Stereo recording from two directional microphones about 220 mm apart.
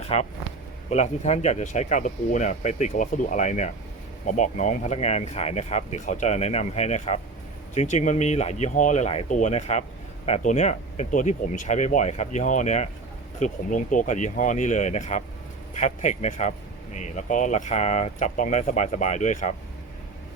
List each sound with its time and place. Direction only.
0.1 s speech: 25° left (ahead or behind)